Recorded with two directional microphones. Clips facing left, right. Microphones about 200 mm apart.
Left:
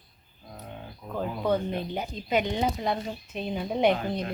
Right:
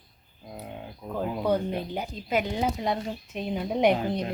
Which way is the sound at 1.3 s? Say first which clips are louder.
Right 1 dB; 10° right (ahead or behind).